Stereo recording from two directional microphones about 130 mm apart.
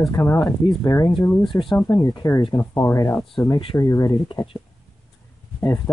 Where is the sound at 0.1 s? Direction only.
20° left (ahead or behind).